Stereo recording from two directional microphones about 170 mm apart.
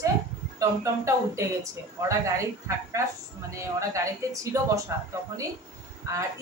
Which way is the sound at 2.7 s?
15° right (ahead or behind).